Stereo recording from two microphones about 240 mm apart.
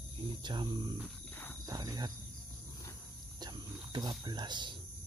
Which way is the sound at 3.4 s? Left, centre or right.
Centre.